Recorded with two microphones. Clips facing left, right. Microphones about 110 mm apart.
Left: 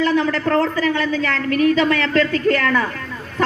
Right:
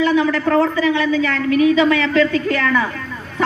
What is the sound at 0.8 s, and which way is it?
A woman's voice, 45° left (ahead or behind).